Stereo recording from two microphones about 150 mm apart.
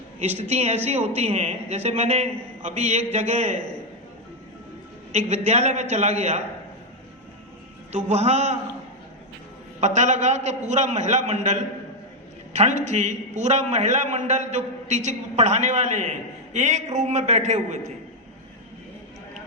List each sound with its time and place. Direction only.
0.2 s a man's voice: 45° right (ahead or behind)
5.5 s a man's voice: 45° right (ahead or behind)
8.1 s a man's voice: 45° right (ahead or behind)
9.8 s a man's voice: 50° right (ahead or behind)